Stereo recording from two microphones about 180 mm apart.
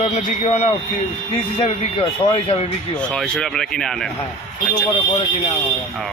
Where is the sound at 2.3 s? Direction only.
35° left (ahead or behind).